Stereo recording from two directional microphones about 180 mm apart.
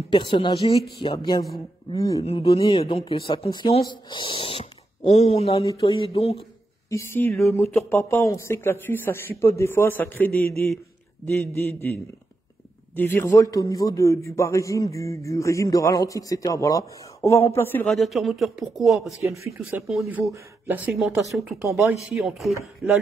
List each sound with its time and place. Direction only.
0.1 s speech: 25° left (ahead or behind)
2.2 s speech: 35° left (ahead or behind)
6.9 s a man's voice: 15° left (ahead or behind)
12.9 s a man's voice: 10° left (ahead or behind)
17.9 s speech: centre (ahead or behind)